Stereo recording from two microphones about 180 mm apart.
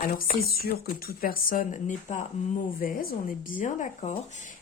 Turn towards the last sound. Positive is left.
turn(degrees=35)  # may be behind; listen again after turning